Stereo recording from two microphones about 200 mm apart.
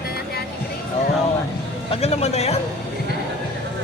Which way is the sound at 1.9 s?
30° left (ahead or behind).